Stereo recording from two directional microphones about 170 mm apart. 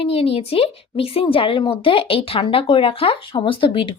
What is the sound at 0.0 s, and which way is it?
A woman's voice, 35° left (ahead or behind).